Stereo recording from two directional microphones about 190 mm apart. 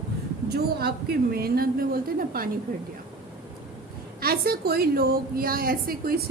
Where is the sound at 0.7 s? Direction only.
55° right (ahead or behind).